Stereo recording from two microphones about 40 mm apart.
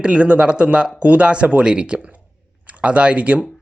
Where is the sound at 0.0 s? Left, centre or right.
Right.